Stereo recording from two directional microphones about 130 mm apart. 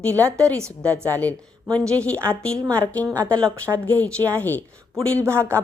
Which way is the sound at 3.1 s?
30° right (ahead or behind).